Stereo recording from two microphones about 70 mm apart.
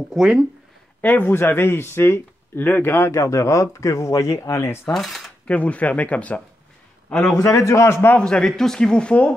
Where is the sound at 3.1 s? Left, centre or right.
Left.